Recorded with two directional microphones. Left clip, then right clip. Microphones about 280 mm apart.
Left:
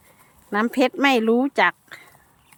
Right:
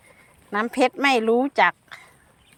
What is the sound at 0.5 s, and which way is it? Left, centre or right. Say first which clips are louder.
Speech: left 1 dB; centre.